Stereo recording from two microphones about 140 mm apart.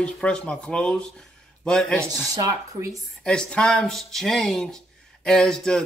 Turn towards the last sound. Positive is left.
turn(degrees=5)  # may be behind; listen again after turning